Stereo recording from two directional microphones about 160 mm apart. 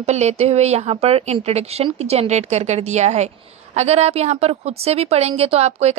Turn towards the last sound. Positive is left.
turn(degrees=-40)  # may be behind; listen again after turning